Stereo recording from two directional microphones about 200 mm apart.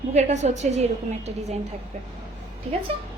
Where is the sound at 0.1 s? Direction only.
35° right (ahead or behind).